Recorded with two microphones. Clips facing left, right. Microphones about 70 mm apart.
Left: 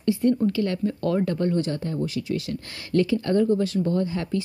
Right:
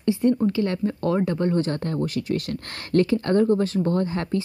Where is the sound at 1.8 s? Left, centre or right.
Right.